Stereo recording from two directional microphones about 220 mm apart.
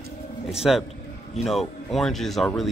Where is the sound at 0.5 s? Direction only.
Centre (ahead or behind).